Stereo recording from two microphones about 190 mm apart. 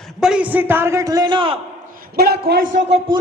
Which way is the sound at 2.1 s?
55° right (ahead or behind).